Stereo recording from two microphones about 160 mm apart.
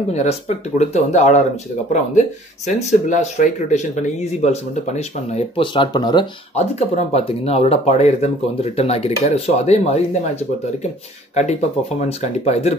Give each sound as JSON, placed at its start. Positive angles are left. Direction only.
{"t": 0.1, "sound": "speech", "side_deg": 45}
{"t": 6.5, "sound": "speech", "side_deg": 40}
{"t": 12.0, "sound": "speech", "side_deg": 45}